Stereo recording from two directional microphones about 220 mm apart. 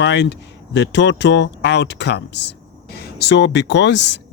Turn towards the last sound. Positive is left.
turn(degrees=55)  # may be behind; listen again after turning